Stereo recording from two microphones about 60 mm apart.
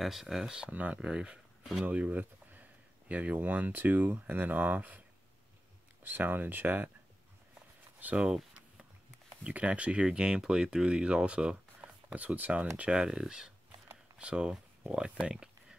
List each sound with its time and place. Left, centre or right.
0.0 s speech: centre
0.7 s speech: right
0.9 s speech: centre
1.9 s speech: right
6.0 s speech: right
8.0 s speech: right
9.4 s speech: right